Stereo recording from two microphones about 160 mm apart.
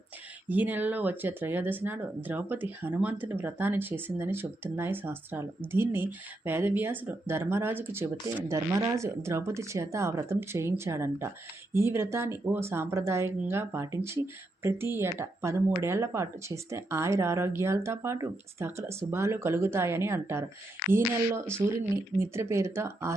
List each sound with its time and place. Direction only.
0.4 s speech: 10° right (ahead or behind)